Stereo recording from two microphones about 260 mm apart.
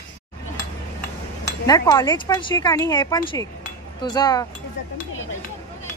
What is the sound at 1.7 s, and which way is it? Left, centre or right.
Speech, centre.